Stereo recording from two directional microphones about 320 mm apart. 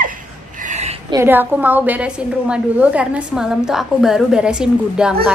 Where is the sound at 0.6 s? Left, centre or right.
Right.